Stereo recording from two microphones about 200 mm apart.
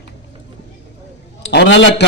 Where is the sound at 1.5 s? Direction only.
65° left (ahead or behind).